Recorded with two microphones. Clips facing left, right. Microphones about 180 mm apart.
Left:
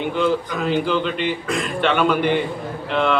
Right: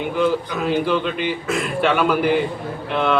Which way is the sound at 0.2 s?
5° right (ahead or behind).